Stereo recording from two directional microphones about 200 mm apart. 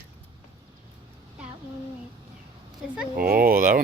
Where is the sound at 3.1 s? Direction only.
50° right (ahead or behind).